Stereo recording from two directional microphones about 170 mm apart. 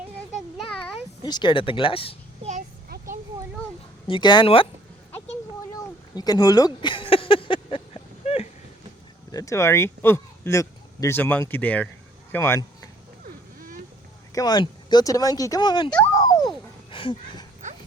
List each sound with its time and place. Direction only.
1.2 s speech: 25° left (ahead or behind)
2.4 s child singing: 45° right (ahead or behind)
4.0 s speech: 30° left (ahead or behind)
6.1 s a sound: 20° left (ahead or behind)
9.3 s speech: 20° left (ahead or behind)
13.6 s a sound: 55° right (ahead or behind)
14.3 s speech: 25° left (ahead or behind)
16.1 s music: 20° left (ahead or behind)
16.9 s speech: 30° left (ahead or behind)